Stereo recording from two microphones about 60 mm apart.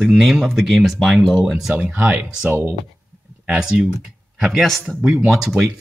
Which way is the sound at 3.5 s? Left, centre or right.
Centre.